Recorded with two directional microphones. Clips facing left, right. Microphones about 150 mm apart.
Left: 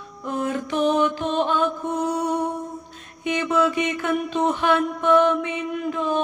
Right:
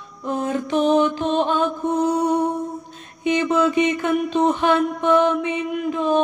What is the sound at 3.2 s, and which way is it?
Music, 20° right (ahead or behind).